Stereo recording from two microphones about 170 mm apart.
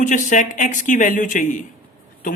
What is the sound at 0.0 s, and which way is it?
Speech, 45° left (ahead or behind).